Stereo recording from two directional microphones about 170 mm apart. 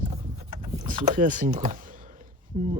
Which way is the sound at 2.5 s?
45° right (ahead or behind).